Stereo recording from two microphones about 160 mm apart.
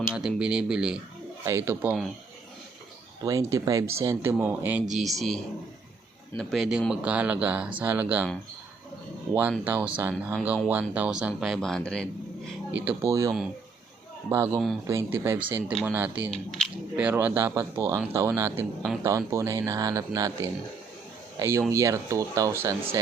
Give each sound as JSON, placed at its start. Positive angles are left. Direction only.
{"t": 0.1, "sound": "speech", "side_deg": -5}
{"t": 1.5, "sound": "speech", "side_deg": -15}
{"t": 3.2, "sound": "speech", "side_deg": -20}
{"t": 4.9, "sound": "speech", "side_deg": 0}
{"t": 9.3, "sound": "speech", "side_deg": -10}
{"t": 12.8, "sound": "speech", "side_deg": -15}